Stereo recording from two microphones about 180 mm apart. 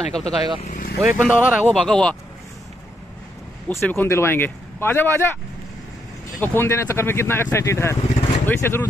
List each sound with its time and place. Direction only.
0.1 s speech: 5° left (ahead or behind)
0.6 s vehicle: 50° left (ahead or behind)
1.0 s speech: 5° right (ahead or behind)
1.7 s speech: 5° left (ahead or behind)
3.6 s speech: 10° left (ahead or behind)
6.4 s speech: 10° left (ahead or behind)